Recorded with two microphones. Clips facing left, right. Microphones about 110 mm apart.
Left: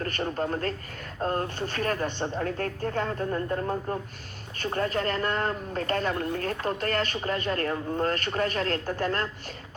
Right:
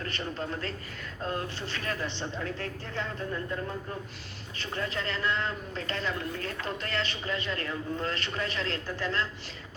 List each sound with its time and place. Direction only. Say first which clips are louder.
0.0 s speech: left 6 dB; 45° left (ahead or behind)